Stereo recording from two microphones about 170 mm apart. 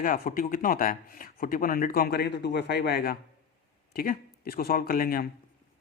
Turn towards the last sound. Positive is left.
turn(degrees=60)  # may be behind; listen again after turning